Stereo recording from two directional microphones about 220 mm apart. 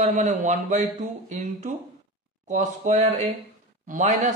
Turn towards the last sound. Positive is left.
turn(degrees=-35)  # may be behind; listen again after turning